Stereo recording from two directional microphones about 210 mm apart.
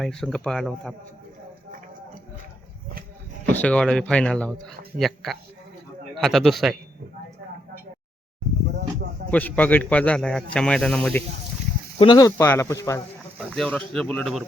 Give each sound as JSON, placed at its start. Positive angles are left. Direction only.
{"t": 0.0, "sound": "speech", "side_deg": 0}
{"t": 3.5, "sound": "speech", "side_deg": 5}
{"t": 9.3, "sound": "speech", "side_deg": 5}
{"t": 11.9, "sound": "speech", "side_deg": 20}